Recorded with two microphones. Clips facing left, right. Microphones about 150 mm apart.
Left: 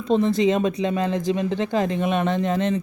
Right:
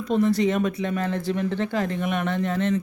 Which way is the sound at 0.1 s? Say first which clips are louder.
Left 2 dB; 25° left (ahead or behind).